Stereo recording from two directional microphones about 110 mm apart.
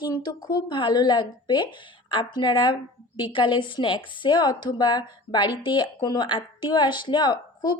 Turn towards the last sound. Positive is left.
turn(degrees=40)  # may be behind; listen again after turning